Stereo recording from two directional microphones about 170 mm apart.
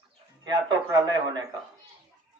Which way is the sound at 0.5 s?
25° right (ahead or behind).